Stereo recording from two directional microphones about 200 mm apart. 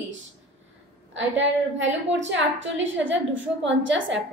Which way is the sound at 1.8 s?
65° right (ahead or behind).